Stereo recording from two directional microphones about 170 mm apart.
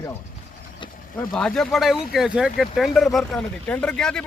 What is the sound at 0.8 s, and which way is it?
Vehicle, 30° left (ahead or behind).